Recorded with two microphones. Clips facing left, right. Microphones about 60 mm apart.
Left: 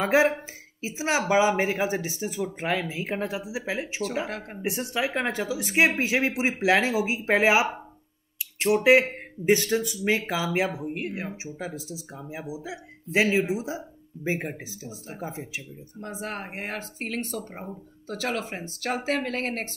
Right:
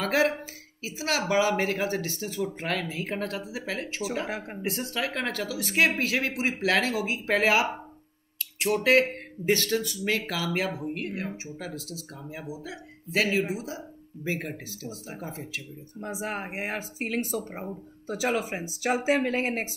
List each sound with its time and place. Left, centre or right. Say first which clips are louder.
0.0 s speech: left 3 dB; left
4.3 s speech: right 1 dB; centre
4.6 s speech: left 4 dB; centre
8.7 s speech: left 3 dB; centre
16.0 s speech: right 1 dB; centre